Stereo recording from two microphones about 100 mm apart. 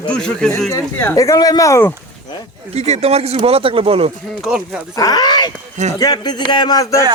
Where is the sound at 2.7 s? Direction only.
90° right; by 4.1 s 70° right (ahead or behind).